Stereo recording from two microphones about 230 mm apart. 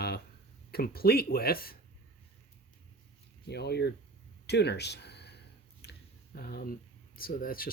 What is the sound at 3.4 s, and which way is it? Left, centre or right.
Speech, left.